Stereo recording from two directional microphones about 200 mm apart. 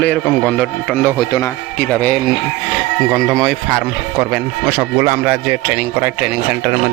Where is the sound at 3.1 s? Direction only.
15° right (ahead or behind).